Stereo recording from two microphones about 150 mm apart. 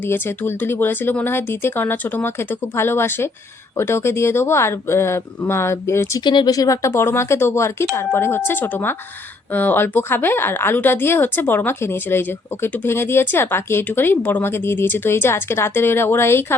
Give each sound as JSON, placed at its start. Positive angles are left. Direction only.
{"t": 0.1, "sound": "speech", "side_deg": 15}
{"t": 6.2, "sound": "speech", "side_deg": 30}